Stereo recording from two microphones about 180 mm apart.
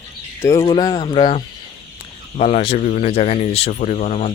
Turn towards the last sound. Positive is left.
turn(degrees=40)  # may be behind; listen again after turning